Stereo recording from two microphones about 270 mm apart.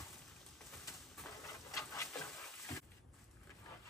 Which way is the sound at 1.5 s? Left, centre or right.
Centre.